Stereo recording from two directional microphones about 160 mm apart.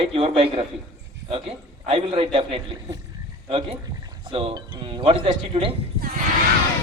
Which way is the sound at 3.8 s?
25° right (ahead or behind).